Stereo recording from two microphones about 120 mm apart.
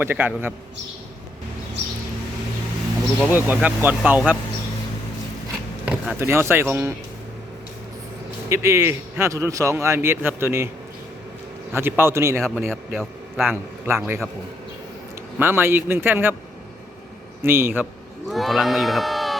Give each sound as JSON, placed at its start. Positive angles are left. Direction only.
{"t": 0.0, "sound": "speech", "side_deg": -15}
{"t": 3.2, "sound": "speech", "side_deg": -15}
{"t": 5.8, "sound": "a sound", "side_deg": -10}
{"t": 6.1, "sound": "a man's voice", "side_deg": -20}
{"t": 8.4, "sound": "a man's voice", "side_deg": -25}
{"t": 11.7, "sound": "a man's voice", "side_deg": -20}
{"t": 12.4, "sound": "a man's voice", "side_deg": 0}
{"t": 13.8, "sound": "a man's voice", "side_deg": -20}
{"t": 15.4, "sound": "speech", "side_deg": -20}
{"t": 17.4, "sound": "a man's voice", "side_deg": -20}
{"t": 18.3, "sound": "a man's voice", "side_deg": 0}